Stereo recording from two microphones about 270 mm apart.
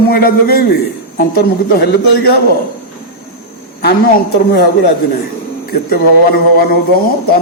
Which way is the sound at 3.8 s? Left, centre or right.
Left.